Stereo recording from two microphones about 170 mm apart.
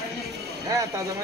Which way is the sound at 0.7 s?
20° right (ahead or behind).